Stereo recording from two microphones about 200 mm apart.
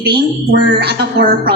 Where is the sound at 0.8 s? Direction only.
55° right (ahead or behind).